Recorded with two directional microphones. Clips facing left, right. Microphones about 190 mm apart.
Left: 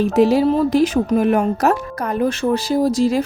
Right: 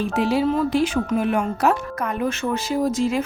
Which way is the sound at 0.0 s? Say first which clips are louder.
Left 6 dB; 40° left (ahead or behind).